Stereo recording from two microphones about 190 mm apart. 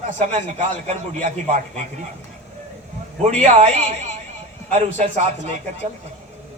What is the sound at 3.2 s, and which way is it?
A man's voice, 35° right (ahead or behind).